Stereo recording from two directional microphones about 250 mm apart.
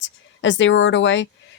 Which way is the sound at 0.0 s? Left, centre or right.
Left.